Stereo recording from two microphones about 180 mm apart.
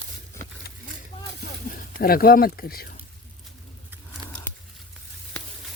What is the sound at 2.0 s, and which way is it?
Speech, 55° left (ahead or behind).